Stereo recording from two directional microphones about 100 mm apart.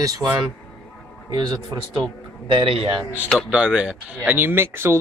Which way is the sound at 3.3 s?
5° right (ahead or behind).